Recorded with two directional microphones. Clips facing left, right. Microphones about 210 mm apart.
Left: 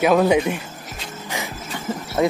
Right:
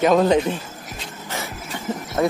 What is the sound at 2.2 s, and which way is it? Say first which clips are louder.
Speech: left 1 dB; 15° left (ahead or behind).